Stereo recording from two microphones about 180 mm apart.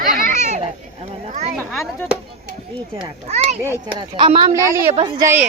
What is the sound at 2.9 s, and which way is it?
Speech, 35° right (ahead or behind).